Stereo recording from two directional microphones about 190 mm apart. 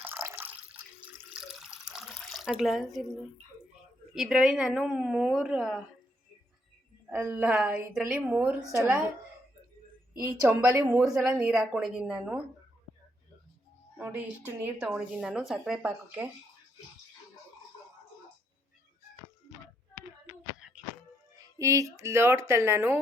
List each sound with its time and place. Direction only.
0.0 s water: 15° right (ahead or behind)
4.1 s speech: centre (ahead or behind)
7.1 s speech: 10° right (ahead or behind)
10.2 s speech: 15° right (ahead or behind)
11.1 s speech: 5° right (ahead or behind)
14.0 s speech: 10° right (ahead or behind)
20.6 s music: 5° right (ahead or behind)
21.6 s speech: 15° right (ahead or behind)